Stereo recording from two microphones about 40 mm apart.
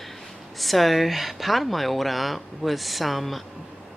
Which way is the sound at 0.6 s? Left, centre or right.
Centre.